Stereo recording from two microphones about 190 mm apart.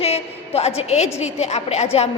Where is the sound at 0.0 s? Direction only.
30° left (ahead or behind).